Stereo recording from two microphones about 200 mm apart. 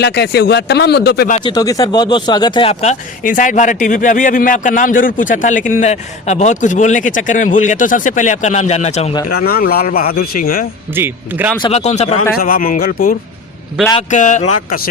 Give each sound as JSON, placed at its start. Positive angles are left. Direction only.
{"t": 0.0, "sound": "speech", "side_deg": 55}
{"t": 1.5, "sound": "speech", "side_deg": 20}
{"t": 9.3, "sound": "a man's voice", "side_deg": 50}
{"t": 10.9, "sound": "speech", "side_deg": -10}
{"t": 11.6, "sound": "speech", "side_deg": 35}
{"t": 12.4, "sound": "a man's voice", "side_deg": 45}